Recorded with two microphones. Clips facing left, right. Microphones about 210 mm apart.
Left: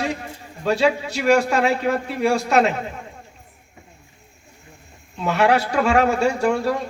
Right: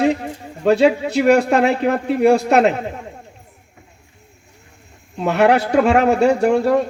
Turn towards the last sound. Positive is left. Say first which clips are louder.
# right 6 dB
turn(degrees=-55)  # may be behind; listen again after turning